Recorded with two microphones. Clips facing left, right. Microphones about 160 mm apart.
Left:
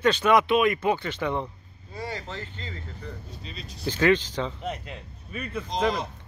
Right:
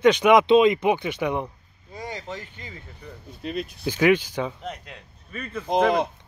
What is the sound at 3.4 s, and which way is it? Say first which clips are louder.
Speech: right 12 dB; 60° right (ahead or behind).